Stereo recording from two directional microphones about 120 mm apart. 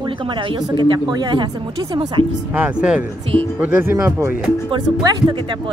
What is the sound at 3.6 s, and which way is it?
Speech, 20° right (ahead or behind).